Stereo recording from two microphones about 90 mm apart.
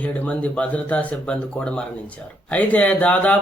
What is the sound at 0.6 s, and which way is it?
Speech, 15° left (ahead or behind).